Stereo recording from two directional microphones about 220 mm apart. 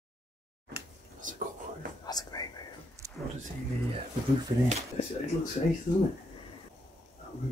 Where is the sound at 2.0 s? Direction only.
15° left (ahead or behind).